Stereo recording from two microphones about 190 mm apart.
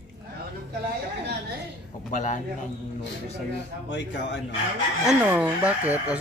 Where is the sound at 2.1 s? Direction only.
40° left (ahead or behind).